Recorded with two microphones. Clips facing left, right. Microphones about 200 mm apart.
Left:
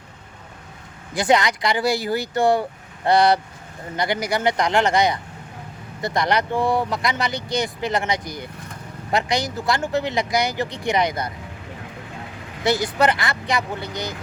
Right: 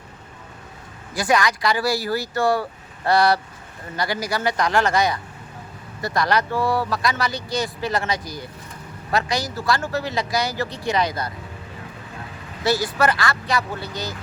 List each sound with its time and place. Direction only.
1.1 s speech: 20° left (ahead or behind)
12.6 s speech: 15° left (ahead or behind)